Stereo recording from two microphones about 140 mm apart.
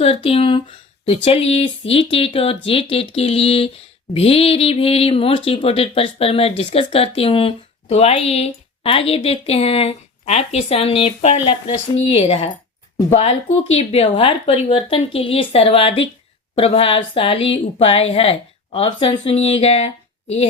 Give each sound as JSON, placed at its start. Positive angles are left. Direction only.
{"t": 0.0, "sound": "speech", "side_deg": 45}
{"t": 11.6, "sound": "speech", "side_deg": 30}
{"t": 12.1, "sound": "speech", "side_deg": 45}